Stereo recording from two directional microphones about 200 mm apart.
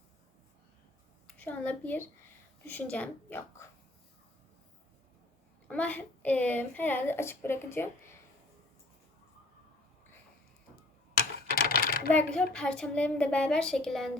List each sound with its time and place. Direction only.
1.3 s a woman's voice: 10° left (ahead or behind)
5.6 s a woman's voice: 5° left (ahead or behind)
11.4 s mechanisms: 45° left (ahead or behind)
12.1 s a woman's voice: 5° left (ahead or behind)